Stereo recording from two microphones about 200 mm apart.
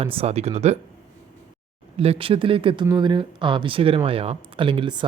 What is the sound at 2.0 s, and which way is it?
Speech, 30° right (ahead or behind).